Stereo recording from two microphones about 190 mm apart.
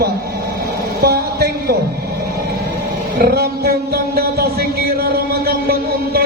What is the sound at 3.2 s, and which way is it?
Music, 55° right (ahead or behind).